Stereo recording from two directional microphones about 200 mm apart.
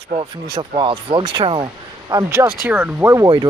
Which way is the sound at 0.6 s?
25° right (ahead or behind).